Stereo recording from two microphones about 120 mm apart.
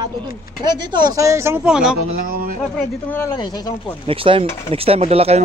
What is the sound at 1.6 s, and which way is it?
Speech, 5° right (ahead or behind).